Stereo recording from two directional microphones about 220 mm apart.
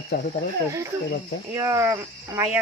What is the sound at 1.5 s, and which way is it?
Speech, 15° right (ahead or behind).